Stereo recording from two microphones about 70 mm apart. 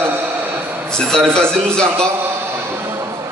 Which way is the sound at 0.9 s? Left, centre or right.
Centre.